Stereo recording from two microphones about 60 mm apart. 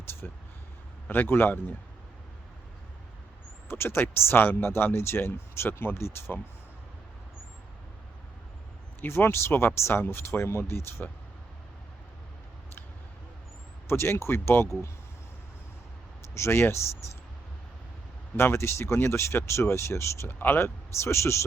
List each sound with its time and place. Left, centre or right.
0.2 s speech: left
3.7 s speech: left
9.0 s speech: left
13.8 s speech: left
16.3 s speech: left
18.3 s speech: left
20.2 s speech: left